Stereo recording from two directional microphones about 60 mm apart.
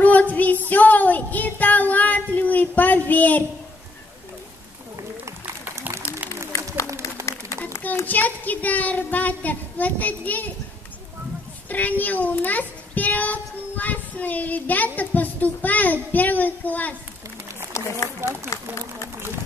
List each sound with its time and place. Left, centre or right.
0.0 s child singing: left
5.8 s a sound: right
7.9 s a child's voice: left
11.7 s a child's voice: left
17.8 s speech: left
18.2 s speech: right